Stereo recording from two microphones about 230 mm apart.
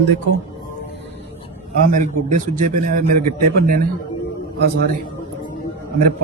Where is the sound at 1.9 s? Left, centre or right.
Right.